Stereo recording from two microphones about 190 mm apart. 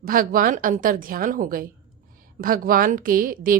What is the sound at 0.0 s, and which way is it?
A woman's voice, 50° right (ahead or behind).